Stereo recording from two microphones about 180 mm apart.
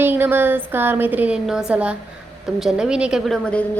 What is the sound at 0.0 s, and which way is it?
A woman's voice, 10° right (ahead or behind).